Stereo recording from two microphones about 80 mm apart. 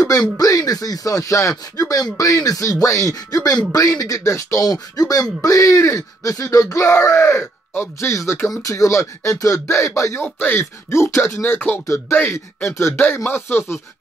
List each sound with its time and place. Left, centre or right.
0.2 s speech: left
7.7 s speech: left
8.1 s speech: left
10.2 s speech: left
11.4 s speech: left